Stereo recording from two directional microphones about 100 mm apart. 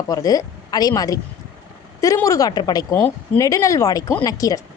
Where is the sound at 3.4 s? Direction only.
30° left (ahead or behind).